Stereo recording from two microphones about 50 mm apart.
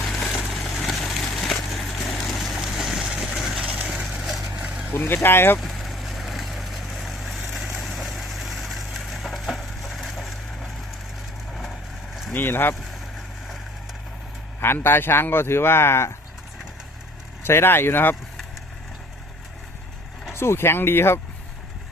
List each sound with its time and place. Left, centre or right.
0.2 s vehicle: centre
0.9 s a sound: centre
4.2 s vehicle: centre
4.9 s speech: left
5.5 s vehicle: centre
7.8 s a sound: centre
11.5 s vehicle: centre
12.3 s speech: left
14.6 s speech: left
17.4 s speech: left
20.3 s speech: left